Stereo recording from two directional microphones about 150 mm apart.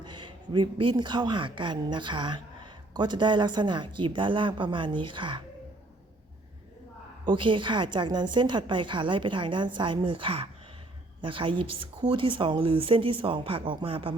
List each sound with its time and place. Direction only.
0.0 s speech: 30° right (ahead or behind)
7.3 s speech: 35° right (ahead or behind)